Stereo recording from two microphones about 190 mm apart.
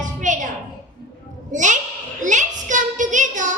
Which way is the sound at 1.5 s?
40° right (ahead or behind).